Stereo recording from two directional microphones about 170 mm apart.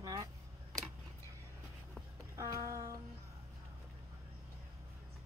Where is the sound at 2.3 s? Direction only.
15° right (ahead or behind).